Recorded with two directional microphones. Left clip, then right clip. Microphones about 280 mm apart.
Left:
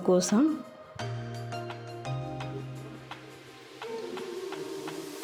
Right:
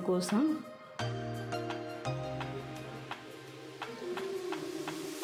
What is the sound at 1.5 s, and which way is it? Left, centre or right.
Music, centre.